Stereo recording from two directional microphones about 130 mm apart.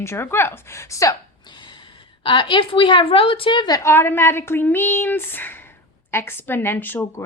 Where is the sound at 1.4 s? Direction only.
35° left (ahead or behind).